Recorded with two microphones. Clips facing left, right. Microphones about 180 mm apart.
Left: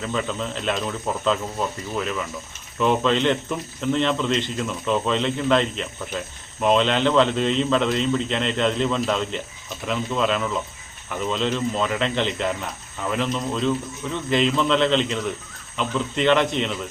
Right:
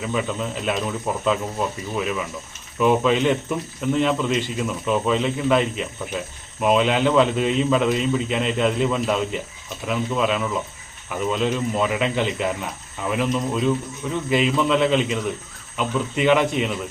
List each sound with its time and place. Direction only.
0.0 s speech: 10° right (ahead or behind)